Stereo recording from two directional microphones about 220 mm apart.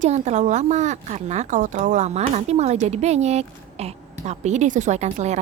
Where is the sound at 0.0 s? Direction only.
30° right (ahead or behind).